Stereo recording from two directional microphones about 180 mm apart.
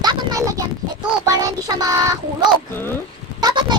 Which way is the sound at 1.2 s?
20° right (ahead or behind).